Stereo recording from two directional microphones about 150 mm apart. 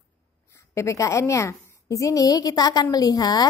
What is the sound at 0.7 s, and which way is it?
A woman's voice, 20° left (ahead or behind).